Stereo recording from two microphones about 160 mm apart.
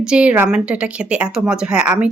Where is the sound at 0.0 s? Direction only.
5° right (ahead or behind).